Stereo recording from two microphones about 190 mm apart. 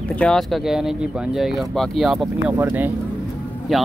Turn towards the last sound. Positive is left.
turn(degrees=0)  # may be behind; listen again after turning